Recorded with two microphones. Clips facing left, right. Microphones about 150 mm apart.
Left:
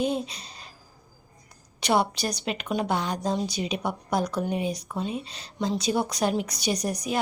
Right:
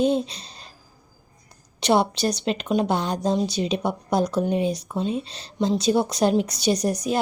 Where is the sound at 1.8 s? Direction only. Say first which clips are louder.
Right 4 dB; 25° right (ahead or behind).